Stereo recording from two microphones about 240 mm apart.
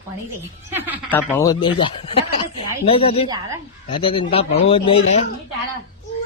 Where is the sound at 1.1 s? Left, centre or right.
Centre; by 5.2 s left.